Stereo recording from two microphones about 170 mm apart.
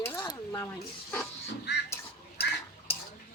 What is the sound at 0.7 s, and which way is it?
Speech, 5° left (ahead or behind).